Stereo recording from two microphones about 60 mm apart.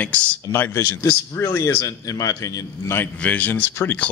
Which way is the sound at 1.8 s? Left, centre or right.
Left.